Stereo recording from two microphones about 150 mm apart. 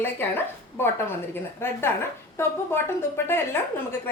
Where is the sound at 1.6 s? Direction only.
15° left (ahead or behind).